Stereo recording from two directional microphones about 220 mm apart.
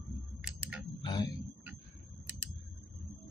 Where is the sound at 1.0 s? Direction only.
20° left (ahead or behind).